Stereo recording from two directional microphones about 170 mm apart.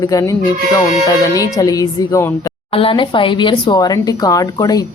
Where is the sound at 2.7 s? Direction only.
35° left (ahead or behind).